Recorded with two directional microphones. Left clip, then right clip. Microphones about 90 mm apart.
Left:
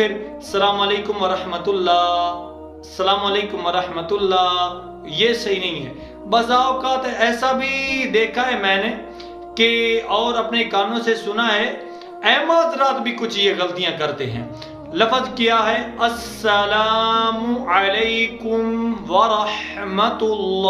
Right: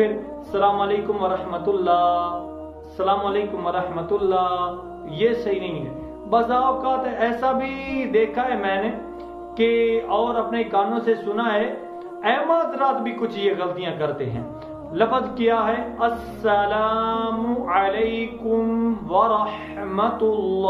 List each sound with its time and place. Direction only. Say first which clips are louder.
0.0 s speech: left 1 dB; 30° left (ahead or behind)
3.0 s a man's voice: left 3 dB; 30° left (ahead or behind)